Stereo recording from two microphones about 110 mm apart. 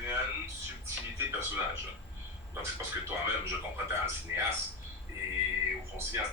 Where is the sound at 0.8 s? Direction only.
25° right (ahead or behind).